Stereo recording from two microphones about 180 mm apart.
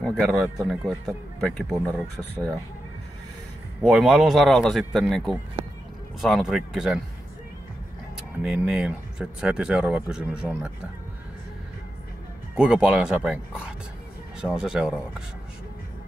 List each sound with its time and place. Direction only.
0.0 s speech: 5° left (ahead or behind)
2.3 s speech: 20° right (ahead or behind)
3.8 s speech: centre (ahead or behind)
8.4 s speech: 5° right (ahead or behind)
12.5 s speech: 5° right (ahead or behind)